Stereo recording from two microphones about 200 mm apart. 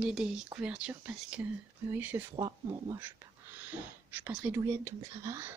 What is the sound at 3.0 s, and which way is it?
Speech, 10° right (ahead or behind).